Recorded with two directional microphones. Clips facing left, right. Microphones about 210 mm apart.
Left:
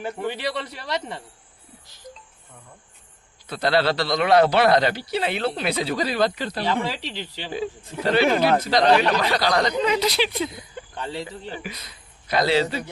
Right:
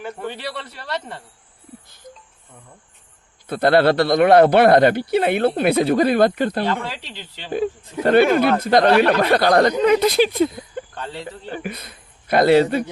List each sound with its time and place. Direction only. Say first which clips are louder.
0.3 s a man's voice: left 2 dB; 15° left (ahead or behind)
3.4 s a man's voice: right 6 dB; 55° right (ahead or behind)
6.7 s a man's voice: even; 10° left (ahead or behind)
7.5 s a man's voice: right 7 dB; 55° right (ahead or behind)
10.9 s speech: left 1 dB; 15° left (ahead or behind)
11.5 s speech: right 5 dB; 55° right (ahead or behind)